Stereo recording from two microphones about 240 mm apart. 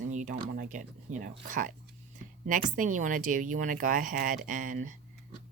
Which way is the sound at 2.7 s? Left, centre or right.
Right.